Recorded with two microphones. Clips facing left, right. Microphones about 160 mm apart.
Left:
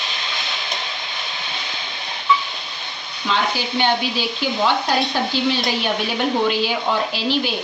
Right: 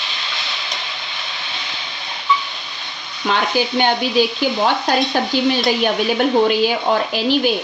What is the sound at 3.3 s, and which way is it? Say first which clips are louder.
Speech: right 2 dB; 55° right (ahead or behind).